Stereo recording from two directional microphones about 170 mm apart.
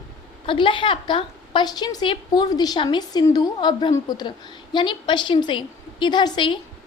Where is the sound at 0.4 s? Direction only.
30° left (ahead or behind).